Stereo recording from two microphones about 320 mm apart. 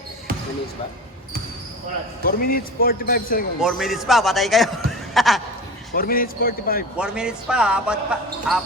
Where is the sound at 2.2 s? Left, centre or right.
Left.